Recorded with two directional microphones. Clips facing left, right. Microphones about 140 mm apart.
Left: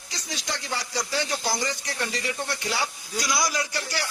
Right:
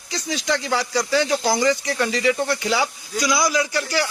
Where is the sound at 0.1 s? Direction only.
90° right.